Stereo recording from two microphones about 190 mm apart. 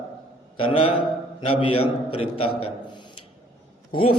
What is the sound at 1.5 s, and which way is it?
A man's voice, 30° left (ahead or behind).